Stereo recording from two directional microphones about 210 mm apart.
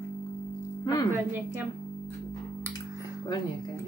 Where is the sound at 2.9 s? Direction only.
15° left (ahead or behind).